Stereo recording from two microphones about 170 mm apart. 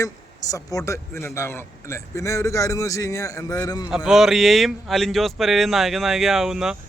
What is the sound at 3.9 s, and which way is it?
Speech, 5° right (ahead or behind).